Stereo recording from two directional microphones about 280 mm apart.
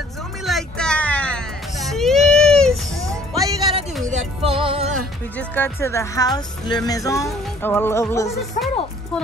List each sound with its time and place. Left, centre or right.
0.4 s music: centre
3.1 s music: centre
4.1 s music: right
5.4 s speech: centre